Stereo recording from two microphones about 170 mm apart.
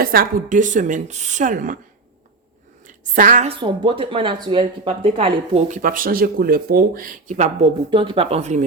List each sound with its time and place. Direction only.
0.0 s speech: 60° right (ahead or behind)
2.8 s a woman's voice: 50° right (ahead or behind)
3.6 s speech: 30° right (ahead or behind)
5.6 s speech: 50° right (ahead or behind)
7.9 s speech: 30° right (ahead or behind)